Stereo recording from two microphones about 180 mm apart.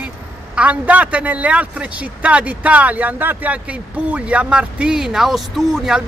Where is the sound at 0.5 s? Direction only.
5° right (ahead or behind).